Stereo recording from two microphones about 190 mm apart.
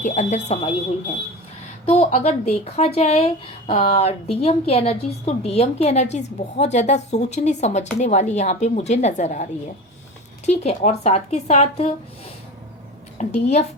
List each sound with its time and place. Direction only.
0.0 s speech: 40° left (ahead or behind)
1.9 s speech: 35° left (ahead or behind)
13.1 s speech: 35° left (ahead or behind)